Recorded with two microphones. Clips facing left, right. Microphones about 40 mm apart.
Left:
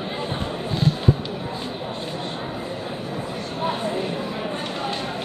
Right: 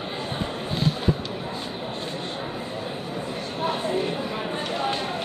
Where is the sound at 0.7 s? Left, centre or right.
Centre.